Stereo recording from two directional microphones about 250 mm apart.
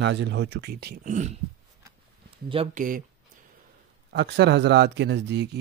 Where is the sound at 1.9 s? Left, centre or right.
Right.